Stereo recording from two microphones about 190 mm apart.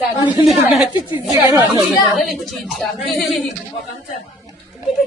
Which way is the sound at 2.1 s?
Centre (ahead or behind).